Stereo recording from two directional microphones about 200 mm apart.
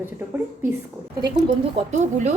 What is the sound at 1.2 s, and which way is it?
Speech, 20° right (ahead or behind).